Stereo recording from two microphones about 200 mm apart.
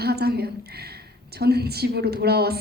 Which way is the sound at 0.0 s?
50° right (ahead or behind).